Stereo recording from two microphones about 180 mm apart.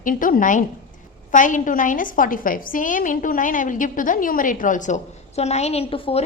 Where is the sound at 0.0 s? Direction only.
50° left (ahead or behind).